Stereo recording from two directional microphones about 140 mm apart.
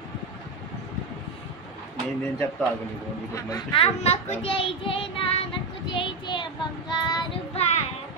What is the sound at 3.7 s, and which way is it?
Speech, 45° left (ahead or behind).